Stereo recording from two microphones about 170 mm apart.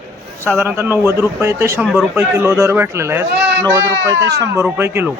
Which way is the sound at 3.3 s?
90° right.